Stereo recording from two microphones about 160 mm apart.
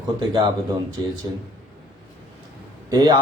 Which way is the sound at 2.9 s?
25° right (ahead or behind).